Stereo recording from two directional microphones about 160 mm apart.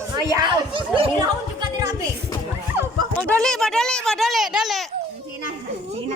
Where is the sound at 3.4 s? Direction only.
5° left (ahead or behind).